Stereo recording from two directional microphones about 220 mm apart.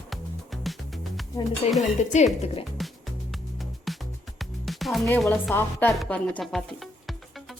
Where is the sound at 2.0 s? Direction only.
35° left (ahead or behind).